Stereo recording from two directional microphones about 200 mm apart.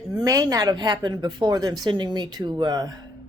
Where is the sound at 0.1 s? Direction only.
20° right (ahead or behind).